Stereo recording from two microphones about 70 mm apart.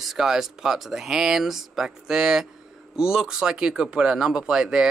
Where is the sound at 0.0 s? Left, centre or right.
Centre.